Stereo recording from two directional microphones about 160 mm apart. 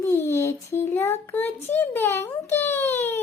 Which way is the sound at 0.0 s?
15° left (ahead or behind).